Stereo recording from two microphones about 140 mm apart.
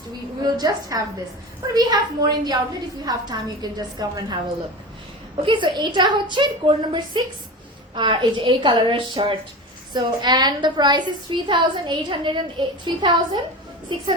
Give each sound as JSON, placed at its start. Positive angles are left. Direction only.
{"t": 0.4, "sound": "a woman's voice", "side_deg": -30}
{"t": 5.5, "sound": "a woman's voice", "side_deg": -35}